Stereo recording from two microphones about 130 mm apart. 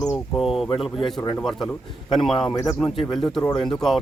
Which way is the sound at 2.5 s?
30° left (ahead or behind).